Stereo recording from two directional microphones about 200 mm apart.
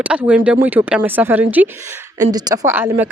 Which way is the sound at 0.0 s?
5° right (ahead or behind).